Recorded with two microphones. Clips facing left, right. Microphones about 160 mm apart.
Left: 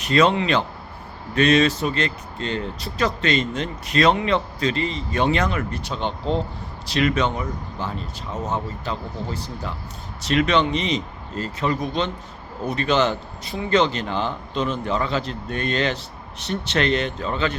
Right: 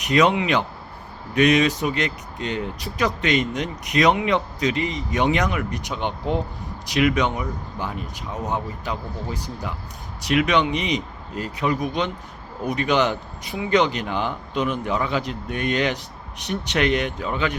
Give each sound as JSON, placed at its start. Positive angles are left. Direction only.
{"t": 0.0, "sound": "speech", "side_deg": -15}